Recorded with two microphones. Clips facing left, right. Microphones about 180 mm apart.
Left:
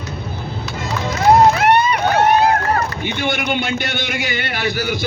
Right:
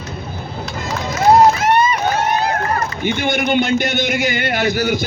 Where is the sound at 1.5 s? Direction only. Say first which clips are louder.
Left 1 dB; 65° left (ahead or behind).